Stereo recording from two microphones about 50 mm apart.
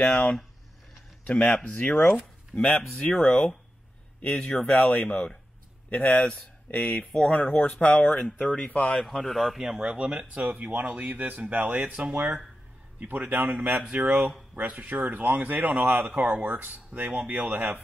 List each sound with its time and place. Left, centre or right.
0.0 s speech: centre
9.0 s a man's voice: centre
9.6 s speech: centre
10.4 s speech: right
10.9 s speech: right
13.0 s speech: right